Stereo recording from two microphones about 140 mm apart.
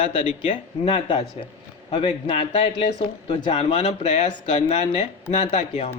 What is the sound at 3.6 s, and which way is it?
Speech, 50° left (ahead or behind).